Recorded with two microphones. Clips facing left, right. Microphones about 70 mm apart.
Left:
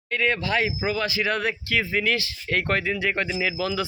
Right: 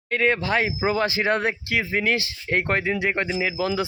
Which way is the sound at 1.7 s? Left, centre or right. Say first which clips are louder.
Even; right.